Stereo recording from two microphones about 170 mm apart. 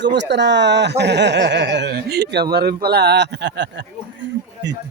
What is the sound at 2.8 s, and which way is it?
Speech, 75° right (ahead or behind).